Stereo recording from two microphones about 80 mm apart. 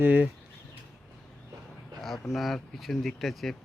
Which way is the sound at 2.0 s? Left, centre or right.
Centre.